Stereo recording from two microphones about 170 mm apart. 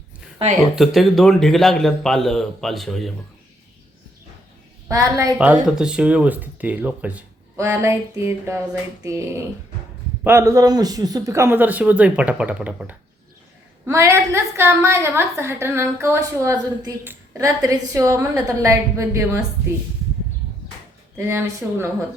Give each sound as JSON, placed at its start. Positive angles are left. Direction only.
{"t": 0.8, "sound": "a man's voice", "side_deg": 0}
{"t": 4.9, "sound": "a woman's voice", "side_deg": -20}
{"t": 5.6, "sound": "a woman's voice", "side_deg": -5}
{"t": 10.2, "sound": "a woman's voice", "side_deg": -15}
{"t": 21.2, "sound": "a woman's voice", "side_deg": -15}